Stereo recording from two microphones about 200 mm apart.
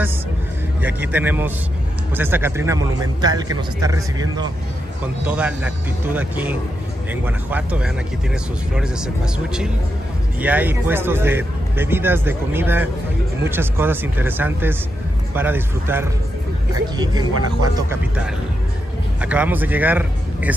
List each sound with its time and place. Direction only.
0.8 s speech: 10° right (ahead or behind)
19.2 s speech: 5° right (ahead or behind)